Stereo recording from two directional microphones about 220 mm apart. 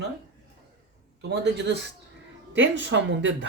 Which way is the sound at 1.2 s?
50° right (ahead or behind).